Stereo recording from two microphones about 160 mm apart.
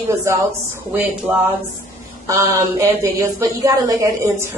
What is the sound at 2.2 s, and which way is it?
A woman's voice, 20° right (ahead or behind).